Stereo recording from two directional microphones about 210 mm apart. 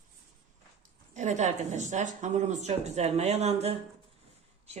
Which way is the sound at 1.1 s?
35° right (ahead or behind).